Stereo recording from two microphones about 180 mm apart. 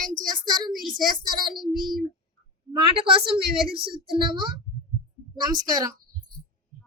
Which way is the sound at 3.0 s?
30° right (ahead or behind).